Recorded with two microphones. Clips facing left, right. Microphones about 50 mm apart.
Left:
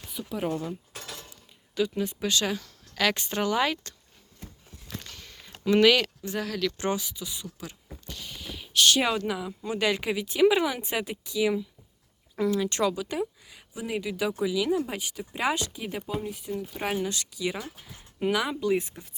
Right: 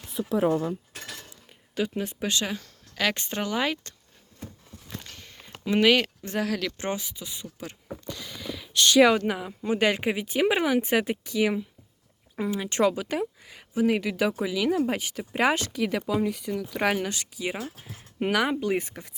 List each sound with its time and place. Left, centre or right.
1.7 s speech: right
2.9 s a woman's voice: centre
3.2 s speech: right
3.4 s speech: centre
5.0 s a sound: centre
6.2 s speech: right
9.1 s speech: right
12.4 s speech: right
15.7 s speech: right
17.1 s speech: right
17.8 s speech: right